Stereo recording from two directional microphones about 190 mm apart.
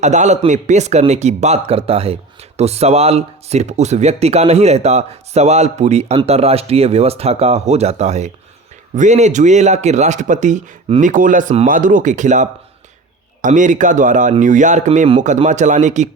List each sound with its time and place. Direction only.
0.0 s speech: 40° right (ahead or behind)